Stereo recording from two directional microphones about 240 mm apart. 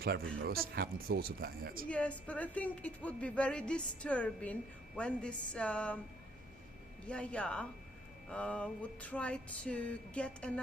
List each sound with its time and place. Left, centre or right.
0.4 s speech: right
1.9 s a woman's voice: centre
7.1 s a woman's voice: centre